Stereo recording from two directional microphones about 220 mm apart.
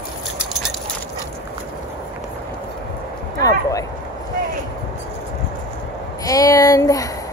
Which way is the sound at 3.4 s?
15° left (ahead or behind).